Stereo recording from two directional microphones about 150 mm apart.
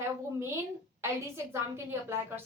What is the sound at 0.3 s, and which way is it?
Speech, 15° right (ahead or behind).